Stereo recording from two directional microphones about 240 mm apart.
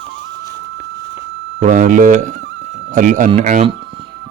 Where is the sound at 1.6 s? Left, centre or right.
Right.